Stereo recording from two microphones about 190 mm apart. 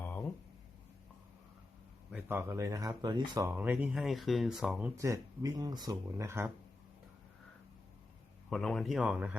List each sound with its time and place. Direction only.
0.0 s a sound: 10° left (ahead or behind)
2.0 s speech: 10° right (ahead or behind)
4.9 s speech: 15° right (ahead or behind)
8.4 s speech: centre (ahead or behind)